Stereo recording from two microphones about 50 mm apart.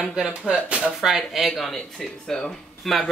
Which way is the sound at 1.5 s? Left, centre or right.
Centre.